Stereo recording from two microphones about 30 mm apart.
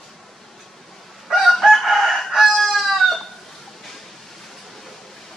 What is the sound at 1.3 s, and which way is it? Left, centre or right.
Chicken, centre.